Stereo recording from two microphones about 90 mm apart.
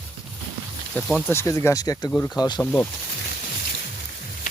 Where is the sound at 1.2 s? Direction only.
30° left (ahead or behind).